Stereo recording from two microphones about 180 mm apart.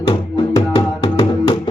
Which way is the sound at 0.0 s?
25° left (ahead or behind).